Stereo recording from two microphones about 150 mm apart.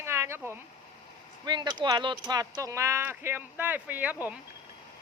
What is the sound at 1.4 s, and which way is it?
Speech, 30° right (ahead or behind).